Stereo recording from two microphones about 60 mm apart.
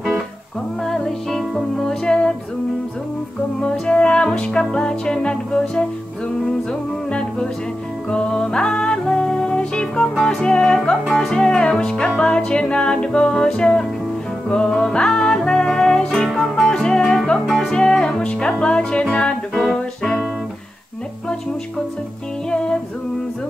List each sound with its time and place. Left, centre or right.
0.8 s music: centre
3.8 s music: centre
22.5 s music: centre